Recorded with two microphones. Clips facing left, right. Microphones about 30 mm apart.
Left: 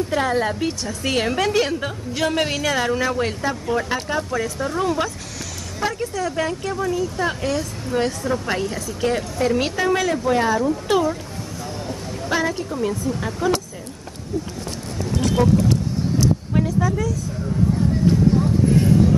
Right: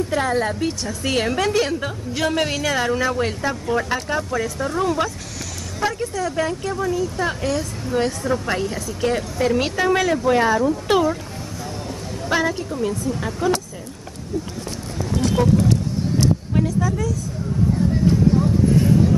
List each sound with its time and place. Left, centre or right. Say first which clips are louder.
0.1 s a woman's voice: left 1 dB; centre
10.2 s speech: right 2 dB; right
12.2 s a woman's voice: right 1 dB; centre
15.4 s speech: left 1 dB; centre
16.5 s speech: left 1 dB; centre